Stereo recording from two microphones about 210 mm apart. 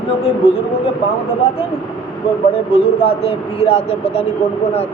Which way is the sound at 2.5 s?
30° left (ahead or behind).